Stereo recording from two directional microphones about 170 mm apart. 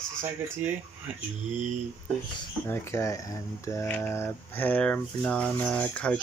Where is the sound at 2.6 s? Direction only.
15° left (ahead or behind).